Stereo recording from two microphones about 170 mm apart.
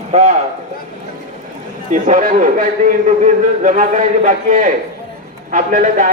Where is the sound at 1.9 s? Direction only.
50° right (ahead or behind).